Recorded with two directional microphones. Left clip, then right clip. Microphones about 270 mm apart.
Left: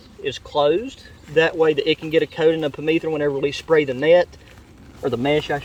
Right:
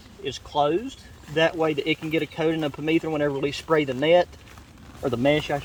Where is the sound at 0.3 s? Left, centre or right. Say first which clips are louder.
Left 5 dB; centre.